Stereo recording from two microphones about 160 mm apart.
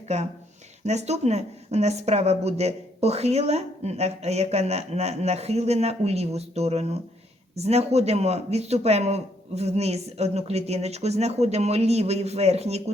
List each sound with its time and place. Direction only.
0.1 s speech: 45° right (ahead or behind)